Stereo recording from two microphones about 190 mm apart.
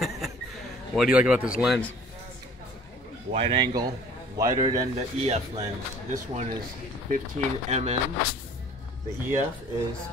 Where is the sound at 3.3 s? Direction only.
30° right (ahead or behind).